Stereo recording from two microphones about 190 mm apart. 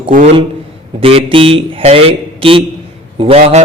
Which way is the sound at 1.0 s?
30° right (ahead or behind).